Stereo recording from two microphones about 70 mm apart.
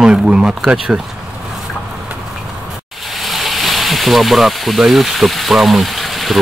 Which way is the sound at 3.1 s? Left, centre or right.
Centre.